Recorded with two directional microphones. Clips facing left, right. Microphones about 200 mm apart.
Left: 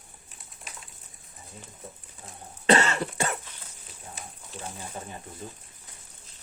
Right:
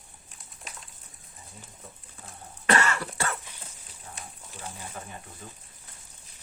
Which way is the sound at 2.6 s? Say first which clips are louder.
Left 3 dB; 25° left (ahead or behind).